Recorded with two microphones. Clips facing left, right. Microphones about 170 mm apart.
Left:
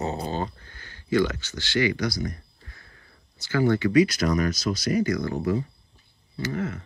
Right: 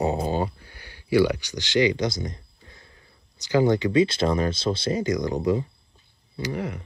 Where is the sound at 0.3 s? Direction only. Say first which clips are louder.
Right 4 dB; 10° right (ahead or behind).